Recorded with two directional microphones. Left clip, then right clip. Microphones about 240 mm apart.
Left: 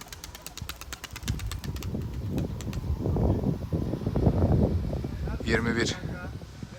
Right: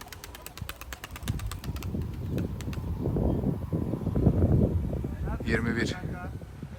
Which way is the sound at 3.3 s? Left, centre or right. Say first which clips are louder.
Left 1 dB; right.